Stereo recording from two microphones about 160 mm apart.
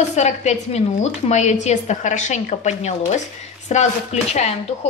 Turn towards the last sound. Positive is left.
turn(degrees=45)  # may be behind; listen again after turning